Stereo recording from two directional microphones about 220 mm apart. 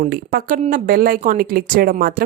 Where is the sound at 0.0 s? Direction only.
40° right (ahead or behind).